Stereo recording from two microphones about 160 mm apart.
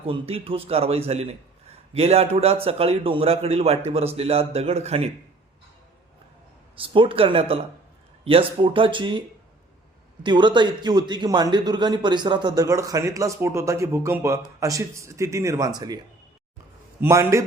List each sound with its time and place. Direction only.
0.0 s a man's voice: 35° right (ahead or behind)
6.7 s a man's voice: 35° right (ahead or behind)
10.2 s a man's voice: 30° right (ahead or behind)
17.0 s a man's voice: 20° right (ahead or behind)